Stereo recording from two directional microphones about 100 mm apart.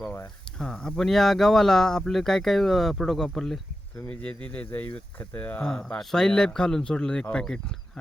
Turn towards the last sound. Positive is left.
turn(degrees=5)  # may be behind; listen again after turning